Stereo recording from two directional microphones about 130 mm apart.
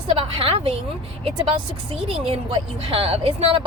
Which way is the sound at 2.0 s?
45° right (ahead or behind).